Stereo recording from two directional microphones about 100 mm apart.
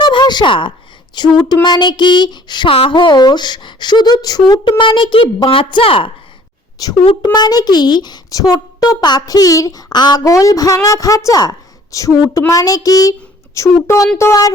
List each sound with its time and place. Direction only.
0.0 s a sound: 50° left (ahead or behind)
1.1 s speech: 45° left (ahead or behind)
2.7 s speech: 60° left (ahead or behind); by 4.7 s 40° left (ahead or behind)
4.8 s a woman's voice: 55° left (ahead or behind)
6.8 s a child's voice: 40° left (ahead or behind)